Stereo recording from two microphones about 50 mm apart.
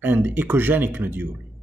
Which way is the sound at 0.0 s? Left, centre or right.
Right.